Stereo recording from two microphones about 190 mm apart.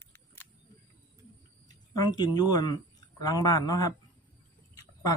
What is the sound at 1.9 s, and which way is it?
Speech, 20° left (ahead or behind).